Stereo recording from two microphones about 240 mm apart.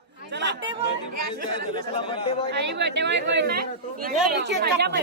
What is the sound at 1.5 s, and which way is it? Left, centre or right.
Speech, left.